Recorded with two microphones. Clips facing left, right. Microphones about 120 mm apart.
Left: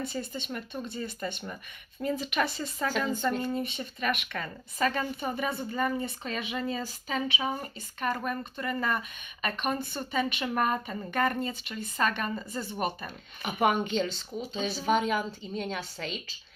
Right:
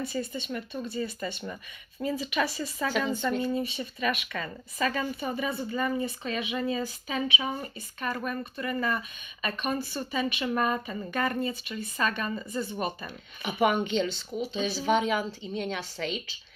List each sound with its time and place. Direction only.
0.1 s a woman's voice: 60° left (ahead or behind); by 16.2 s 40° left (ahead or behind)